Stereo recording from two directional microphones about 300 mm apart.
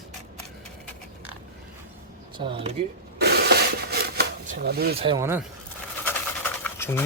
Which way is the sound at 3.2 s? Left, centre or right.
Right.